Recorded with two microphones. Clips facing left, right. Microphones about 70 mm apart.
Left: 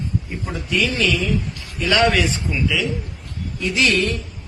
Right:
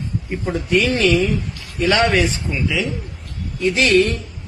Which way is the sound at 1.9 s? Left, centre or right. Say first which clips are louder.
Right 1 dB; right.